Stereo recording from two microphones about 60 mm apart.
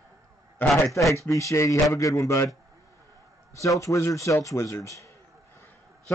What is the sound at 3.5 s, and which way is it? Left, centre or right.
A man's voice, left.